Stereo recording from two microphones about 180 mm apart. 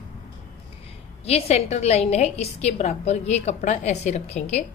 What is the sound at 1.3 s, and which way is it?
A woman's voice, 35° left (ahead or behind).